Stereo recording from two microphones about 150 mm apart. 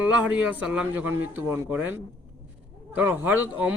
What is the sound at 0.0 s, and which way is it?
A man's voice, 10° right (ahead or behind).